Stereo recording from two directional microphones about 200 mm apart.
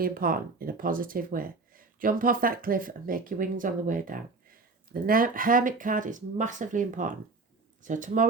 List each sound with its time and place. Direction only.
0.0 s speech: 45° right (ahead or behind)